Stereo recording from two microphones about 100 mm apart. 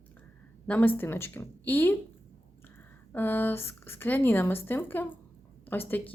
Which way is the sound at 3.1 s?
20° left (ahead or behind).